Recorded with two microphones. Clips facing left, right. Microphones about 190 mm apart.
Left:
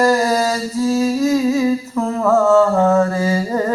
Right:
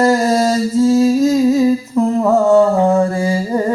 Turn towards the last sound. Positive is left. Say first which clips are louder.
# right 1 dB
turn(degrees=-10)  # may be behind; listen again after turning